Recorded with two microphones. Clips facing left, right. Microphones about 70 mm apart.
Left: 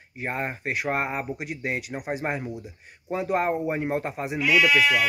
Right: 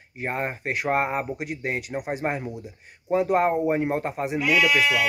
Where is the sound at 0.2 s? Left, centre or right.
Centre.